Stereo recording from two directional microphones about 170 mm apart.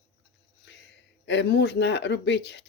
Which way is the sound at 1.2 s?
90° left.